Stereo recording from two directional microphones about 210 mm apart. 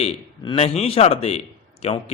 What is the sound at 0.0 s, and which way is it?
A man's voice, 30° left (ahead or behind).